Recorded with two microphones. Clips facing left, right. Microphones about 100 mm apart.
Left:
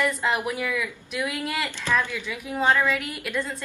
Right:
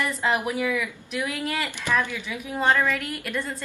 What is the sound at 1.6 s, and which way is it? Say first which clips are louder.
Speech: left 1 dB; 15° right (ahead or behind).